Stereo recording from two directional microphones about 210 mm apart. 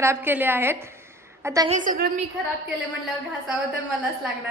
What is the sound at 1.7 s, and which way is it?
Speech, 40° right (ahead or behind).